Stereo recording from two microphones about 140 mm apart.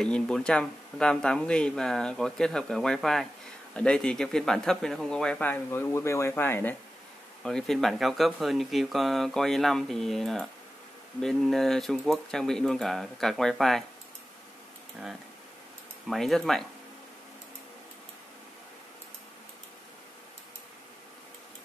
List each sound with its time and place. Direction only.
0.0 s speech: 5° left (ahead or behind)
7.4 s speech: centre (ahead or behind)
15.0 s speech: centre (ahead or behind)